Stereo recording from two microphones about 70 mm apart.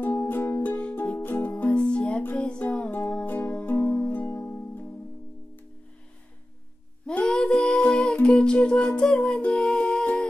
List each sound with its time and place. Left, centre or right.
0.0 s music: left
4.3 s music: left
7.1 s music: centre